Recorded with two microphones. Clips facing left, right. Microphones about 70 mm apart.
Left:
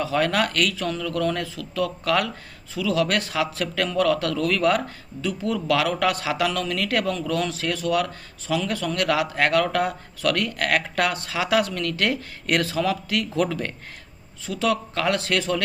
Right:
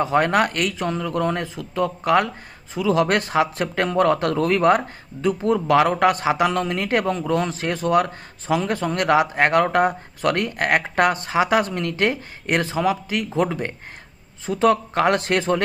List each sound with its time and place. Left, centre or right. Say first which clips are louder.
0.0 s speech: right 4 dB; right